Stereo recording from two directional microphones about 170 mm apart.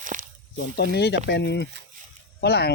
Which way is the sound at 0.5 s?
65° left (ahead or behind).